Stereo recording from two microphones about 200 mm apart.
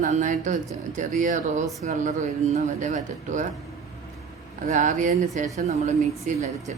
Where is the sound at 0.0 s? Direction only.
40° right (ahead or behind).